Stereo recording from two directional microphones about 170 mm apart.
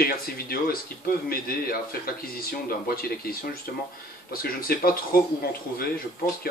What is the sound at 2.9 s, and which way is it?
Speech, 60° left (ahead or behind).